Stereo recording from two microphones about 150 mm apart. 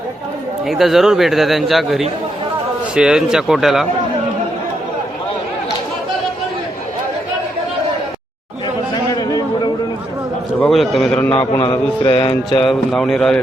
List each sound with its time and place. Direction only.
0.6 s a man's voice: centre (ahead or behind)
9.1 s a sound: 25° left (ahead or behind)
10.6 s a man's voice: centre (ahead or behind)
11.6 s mantra: 30° left (ahead or behind)
12.6 s a man's voice: centre (ahead or behind)